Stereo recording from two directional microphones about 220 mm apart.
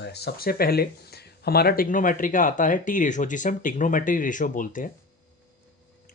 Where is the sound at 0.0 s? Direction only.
50° left (ahead or behind).